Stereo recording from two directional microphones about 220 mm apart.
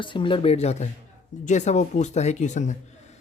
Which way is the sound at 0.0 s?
20° left (ahead or behind).